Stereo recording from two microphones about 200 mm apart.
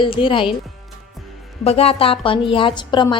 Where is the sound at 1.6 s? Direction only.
30° left (ahead or behind).